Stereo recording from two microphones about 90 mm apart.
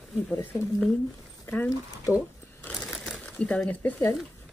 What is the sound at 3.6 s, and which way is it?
Speech, 25° left (ahead or behind).